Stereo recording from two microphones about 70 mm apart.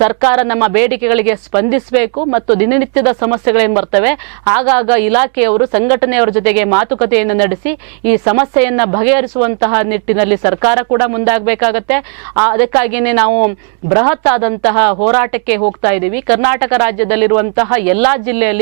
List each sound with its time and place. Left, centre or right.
0.0 s speech: centre